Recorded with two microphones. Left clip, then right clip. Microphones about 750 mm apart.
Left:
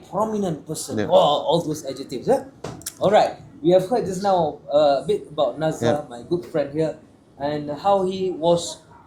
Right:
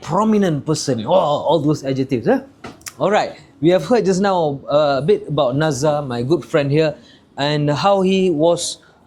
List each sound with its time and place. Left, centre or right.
0.1 s speech: right
2.8 s speech: right